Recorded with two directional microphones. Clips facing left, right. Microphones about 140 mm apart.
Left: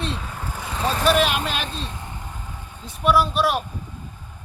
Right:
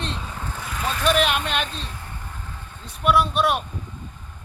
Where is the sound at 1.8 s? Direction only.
20° left (ahead or behind).